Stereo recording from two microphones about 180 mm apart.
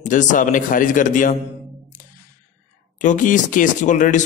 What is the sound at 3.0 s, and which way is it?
Speech, 45° left (ahead or behind).